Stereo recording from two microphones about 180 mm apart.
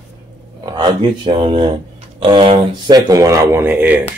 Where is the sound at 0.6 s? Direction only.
20° right (ahead or behind).